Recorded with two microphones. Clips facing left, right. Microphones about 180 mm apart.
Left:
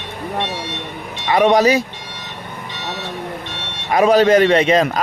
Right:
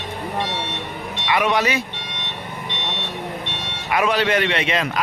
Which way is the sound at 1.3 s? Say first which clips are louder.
Left 7 dB; 40° left (ahead or behind).